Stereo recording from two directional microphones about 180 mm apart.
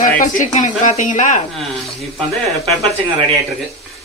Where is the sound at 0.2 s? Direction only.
45° left (ahead or behind).